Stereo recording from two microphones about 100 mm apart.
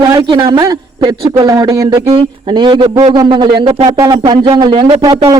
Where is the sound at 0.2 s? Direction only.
55° right (ahead or behind).